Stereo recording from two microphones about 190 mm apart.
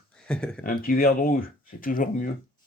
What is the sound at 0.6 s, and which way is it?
Speech, 45° left (ahead or behind).